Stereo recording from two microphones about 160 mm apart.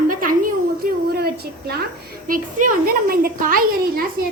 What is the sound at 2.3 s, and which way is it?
A woman's voice, 60° right (ahead or behind).